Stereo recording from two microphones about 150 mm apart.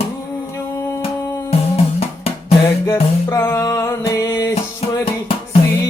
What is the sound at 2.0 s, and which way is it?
Music, 40° left (ahead or behind).